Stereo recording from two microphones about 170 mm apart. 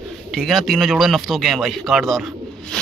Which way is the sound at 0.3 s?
Centre (ahead or behind).